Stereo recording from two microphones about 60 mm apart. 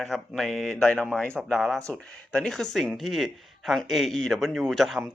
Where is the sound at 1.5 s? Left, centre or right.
Centre.